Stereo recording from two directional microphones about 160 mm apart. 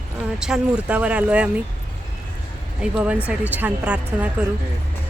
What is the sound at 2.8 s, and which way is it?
Speech, 5° right (ahead or behind).